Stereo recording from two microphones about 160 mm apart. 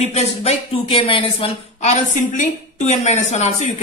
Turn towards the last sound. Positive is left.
turn(degrees=45)  # may be behind; listen again after turning